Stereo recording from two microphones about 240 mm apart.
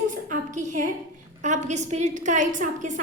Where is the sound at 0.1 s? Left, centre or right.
Right.